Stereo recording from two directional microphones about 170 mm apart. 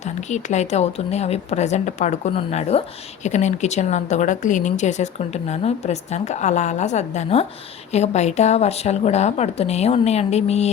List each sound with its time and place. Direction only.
0.3 s a woman's voice: 45° left (ahead or behind)